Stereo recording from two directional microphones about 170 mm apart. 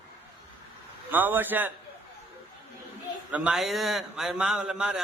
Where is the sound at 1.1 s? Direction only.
10° right (ahead or behind).